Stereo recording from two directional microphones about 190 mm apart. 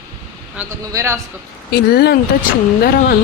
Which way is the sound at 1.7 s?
55° left (ahead or behind).